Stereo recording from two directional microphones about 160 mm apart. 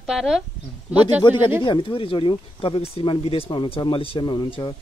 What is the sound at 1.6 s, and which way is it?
Speech, 30° left (ahead or behind).